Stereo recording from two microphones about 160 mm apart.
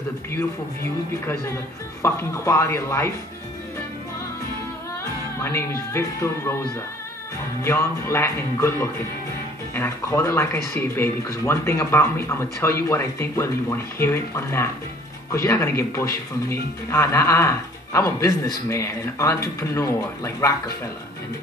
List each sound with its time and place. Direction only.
2.0 s speech: 15° left (ahead or behind)
5.4 s speech: 15° left (ahead or behind)
7.6 s speech: 15° left (ahead or behind)